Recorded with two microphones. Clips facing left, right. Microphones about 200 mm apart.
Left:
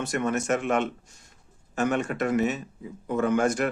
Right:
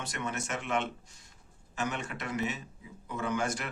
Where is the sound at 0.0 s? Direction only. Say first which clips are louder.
Left 10 dB; 50° left (ahead or behind).